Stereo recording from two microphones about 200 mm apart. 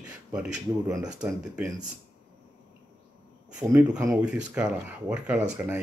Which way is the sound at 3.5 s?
5° right (ahead or behind).